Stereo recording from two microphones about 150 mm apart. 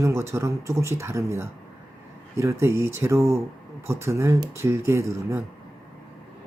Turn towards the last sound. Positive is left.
turn(degrees=-20)  # may be behind; listen again after turning